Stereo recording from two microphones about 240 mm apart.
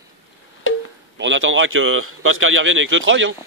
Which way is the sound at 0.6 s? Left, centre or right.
Left.